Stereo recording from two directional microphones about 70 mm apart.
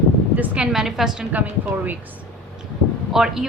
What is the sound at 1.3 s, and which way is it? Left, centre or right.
Speech, right.